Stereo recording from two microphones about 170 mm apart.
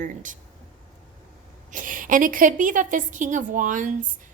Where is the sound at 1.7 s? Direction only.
50° right (ahead or behind).